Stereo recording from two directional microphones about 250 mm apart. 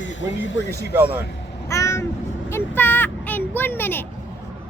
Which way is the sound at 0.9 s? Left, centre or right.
Centre.